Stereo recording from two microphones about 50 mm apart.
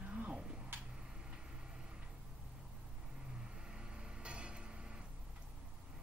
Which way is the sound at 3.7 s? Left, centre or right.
Centre.